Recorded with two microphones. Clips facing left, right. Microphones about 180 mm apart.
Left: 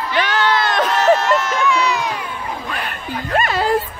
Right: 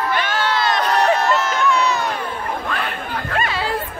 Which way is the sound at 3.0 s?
55° right (ahead or behind).